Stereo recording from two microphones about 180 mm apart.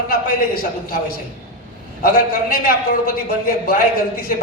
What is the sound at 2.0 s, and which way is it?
A man's voice, 55° left (ahead or behind).